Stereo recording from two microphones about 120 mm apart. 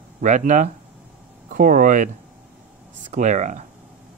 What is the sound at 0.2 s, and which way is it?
Speech, 90° right.